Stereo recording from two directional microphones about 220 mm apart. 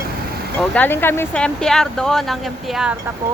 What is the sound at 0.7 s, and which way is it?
Speech, 10° left (ahead or behind).